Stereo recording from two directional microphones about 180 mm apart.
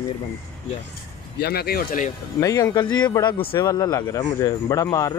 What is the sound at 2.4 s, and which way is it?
Speech, 20° left (ahead or behind).